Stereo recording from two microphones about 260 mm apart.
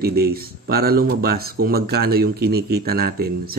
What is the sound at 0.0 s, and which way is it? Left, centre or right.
Speech, right.